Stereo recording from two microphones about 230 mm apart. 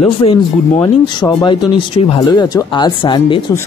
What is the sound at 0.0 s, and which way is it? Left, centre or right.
Speech, left.